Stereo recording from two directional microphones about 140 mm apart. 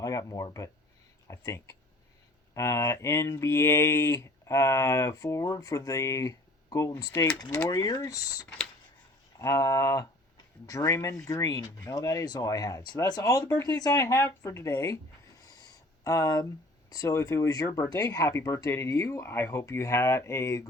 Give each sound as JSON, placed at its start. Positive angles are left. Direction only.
{"t": 0.0, "sound": "speech", "side_deg": 25}
{"t": 7.3, "sound": "speech", "side_deg": 30}
{"t": 15.4, "sound": "a sound", "side_deg": 25}
{"t": 16.9, "sound": "speech", "side_deg": 25}